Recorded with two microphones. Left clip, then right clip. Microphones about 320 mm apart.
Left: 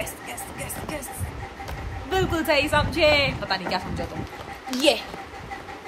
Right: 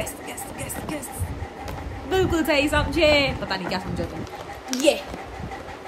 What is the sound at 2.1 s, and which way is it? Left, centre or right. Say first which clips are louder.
A woman's voice: right 1 dB; centre.